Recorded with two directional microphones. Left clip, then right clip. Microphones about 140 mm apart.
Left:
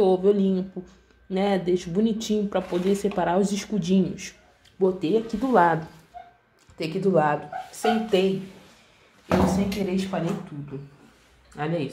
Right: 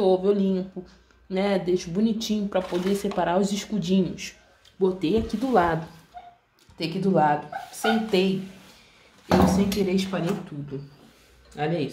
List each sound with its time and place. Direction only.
0.0 s speech: 15° left (ahead or behind)
6.8 s speech: 10° left (ahead or behind)
9.5 s speech: centre (ahead or behind)
11.5 s speech: 10° left (ahead or behind)